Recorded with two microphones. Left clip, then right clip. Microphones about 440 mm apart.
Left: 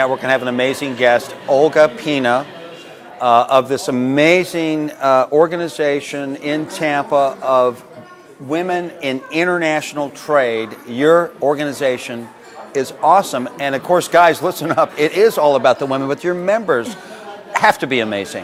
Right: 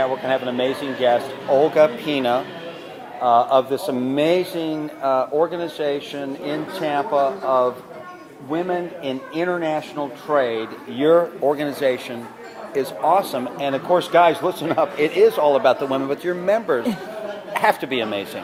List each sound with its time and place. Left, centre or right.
0.0 s a man's voice: left
5.9 s speech: left
6.1 s a man's voice: left